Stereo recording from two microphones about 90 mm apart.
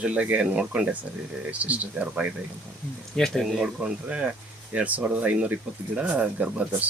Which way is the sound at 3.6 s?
10° right (ahead or behind).